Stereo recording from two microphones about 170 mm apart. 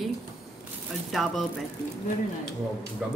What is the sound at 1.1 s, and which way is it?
Speech, centre (ahead or behind).